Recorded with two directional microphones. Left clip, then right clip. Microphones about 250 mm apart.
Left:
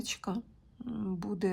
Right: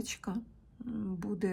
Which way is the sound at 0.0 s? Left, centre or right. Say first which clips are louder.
Left 3 dB; centre.